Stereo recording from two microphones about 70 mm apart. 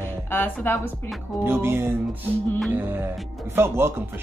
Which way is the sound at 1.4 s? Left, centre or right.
Right.